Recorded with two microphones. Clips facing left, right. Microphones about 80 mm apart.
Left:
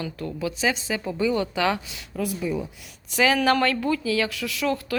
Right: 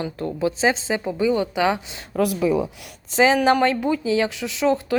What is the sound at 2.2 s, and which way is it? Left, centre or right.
Speech, right.